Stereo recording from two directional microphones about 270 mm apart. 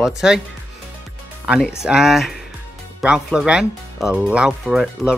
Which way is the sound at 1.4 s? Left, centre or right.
Centre.